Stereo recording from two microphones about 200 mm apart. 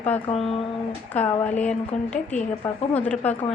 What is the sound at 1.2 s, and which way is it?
A woman's voice, 10° left (ahead or behind).